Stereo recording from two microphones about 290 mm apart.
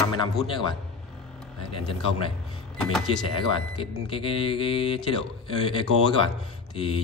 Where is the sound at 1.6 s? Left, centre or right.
Centre.